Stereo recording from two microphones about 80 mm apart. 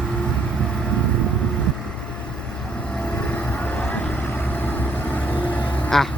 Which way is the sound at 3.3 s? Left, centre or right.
Centre.